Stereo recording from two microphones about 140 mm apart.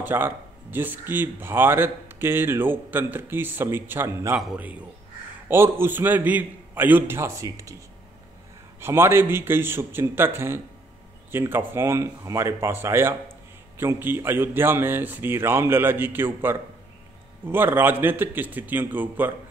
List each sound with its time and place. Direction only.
0.0 s speech: 15° right (ahead or behind)
8.8 s speech: 15° right (ahead or behind)